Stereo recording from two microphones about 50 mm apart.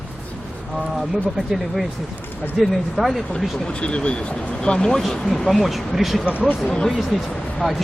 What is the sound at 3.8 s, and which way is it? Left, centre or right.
Speech, left.